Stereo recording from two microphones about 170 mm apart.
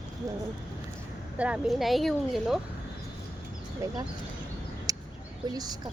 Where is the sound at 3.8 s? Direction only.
15° right (ahead or behind).